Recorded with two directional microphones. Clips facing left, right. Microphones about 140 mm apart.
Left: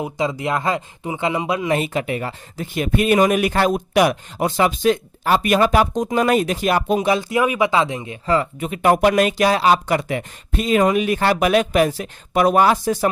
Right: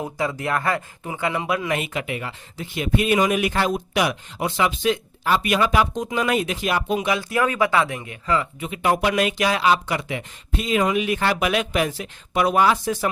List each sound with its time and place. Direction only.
0.0 s speech: 15° left (ahead or behind)
1.8 s speech: 35° left (ahead or behind)
7.2 s speech: 20° left (ahead or behind)
8.4 s speech: 50° left (ahead or behind)